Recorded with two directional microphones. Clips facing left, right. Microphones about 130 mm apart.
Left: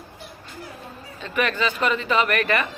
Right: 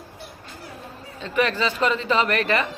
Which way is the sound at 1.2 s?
30° right (ahead or behind).